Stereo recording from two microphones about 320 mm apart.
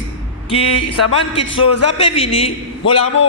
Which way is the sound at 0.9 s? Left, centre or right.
Left.